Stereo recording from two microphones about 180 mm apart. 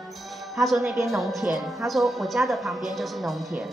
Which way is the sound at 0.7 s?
15° right (ahead or behind).